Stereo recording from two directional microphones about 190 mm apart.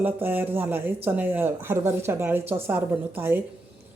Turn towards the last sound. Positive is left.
turn(degrees=-10)  # may be behind; listen again after turning